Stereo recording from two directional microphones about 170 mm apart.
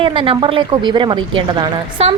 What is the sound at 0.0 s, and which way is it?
A woman's voice, 30° right (ahead or behind).